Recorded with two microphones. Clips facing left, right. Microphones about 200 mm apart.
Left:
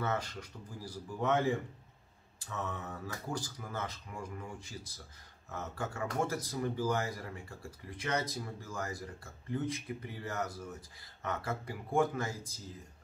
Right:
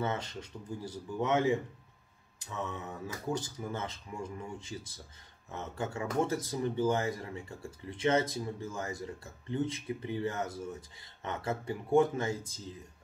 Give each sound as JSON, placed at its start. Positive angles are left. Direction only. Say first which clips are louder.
{"t": 0.0, "sound": "speech", "louder": "right 1 dB", "side_deg": -25}
{"t": 3.3, "sound": "speech", "louder": "right 3 dB", "side_deg": -25}